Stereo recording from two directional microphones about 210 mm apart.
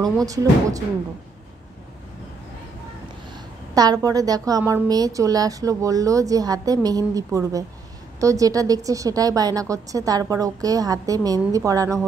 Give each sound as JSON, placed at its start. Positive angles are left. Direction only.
{"t": 0.0, "sound": "a woman's voice", "side_deg": -15}
{"t": 3.7, "sound": "a woman's voice", "side_deg": -20}